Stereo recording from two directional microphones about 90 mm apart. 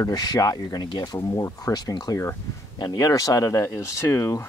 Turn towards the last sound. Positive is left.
turn(degrees=35)  # may be behind; listen again after turning